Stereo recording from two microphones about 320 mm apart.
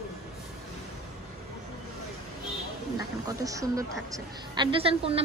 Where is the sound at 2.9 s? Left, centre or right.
Centre.